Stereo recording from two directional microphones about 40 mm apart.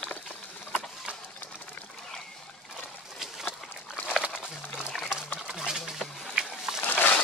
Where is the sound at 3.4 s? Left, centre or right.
Left.